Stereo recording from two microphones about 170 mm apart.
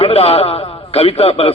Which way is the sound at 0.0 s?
35° left (ahead or behind).